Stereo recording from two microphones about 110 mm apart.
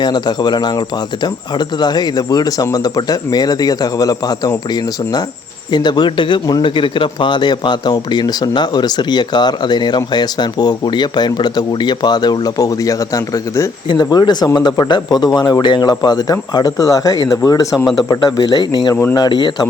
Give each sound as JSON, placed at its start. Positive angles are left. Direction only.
{"t": 0.0, "sound": "a man's voice", "side_deg": 40}
{"t": 18.9, "sound": "a man's voice", "side_deg": 30}